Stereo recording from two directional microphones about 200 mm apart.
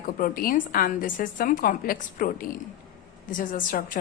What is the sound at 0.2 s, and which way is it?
A woman's voice, 45° left (ahead or behind).